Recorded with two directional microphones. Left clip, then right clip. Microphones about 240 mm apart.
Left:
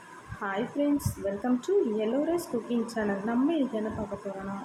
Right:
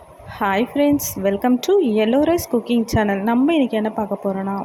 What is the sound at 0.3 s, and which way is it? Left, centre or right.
A woman's voice, right.